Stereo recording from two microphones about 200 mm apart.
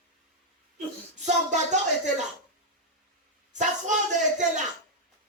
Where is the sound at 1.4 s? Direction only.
35° right (ahead or behind).